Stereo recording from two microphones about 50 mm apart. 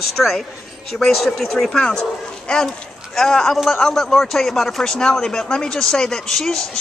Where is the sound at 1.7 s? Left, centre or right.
Centre.